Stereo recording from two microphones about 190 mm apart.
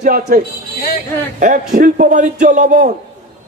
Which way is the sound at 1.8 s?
45° right (ahead or behind).